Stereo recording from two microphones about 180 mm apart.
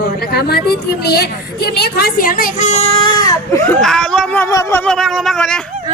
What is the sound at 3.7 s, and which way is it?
Speech, centre (ahead or behind).